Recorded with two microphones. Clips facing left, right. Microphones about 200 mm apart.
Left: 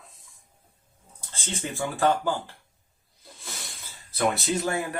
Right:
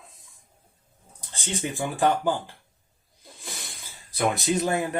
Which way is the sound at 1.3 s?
15° right (ahead or behind).